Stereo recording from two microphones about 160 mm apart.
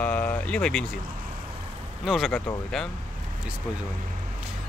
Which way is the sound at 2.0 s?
Centre (ahead or behind).